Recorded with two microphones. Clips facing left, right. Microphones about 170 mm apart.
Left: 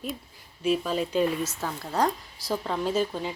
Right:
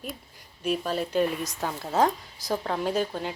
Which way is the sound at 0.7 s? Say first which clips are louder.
Left 2 dB; 45° right (ahead or behind).